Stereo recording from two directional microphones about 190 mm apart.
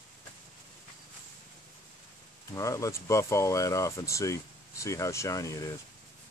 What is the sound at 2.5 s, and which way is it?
Speech, 15° left (ahead or behind).